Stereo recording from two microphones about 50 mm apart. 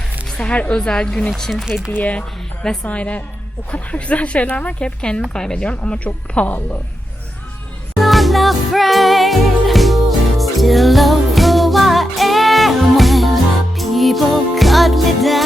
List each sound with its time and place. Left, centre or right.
0.3 s speech: left
1.4 s speech: centre
2.8 s speech: left
7.9 s music: centre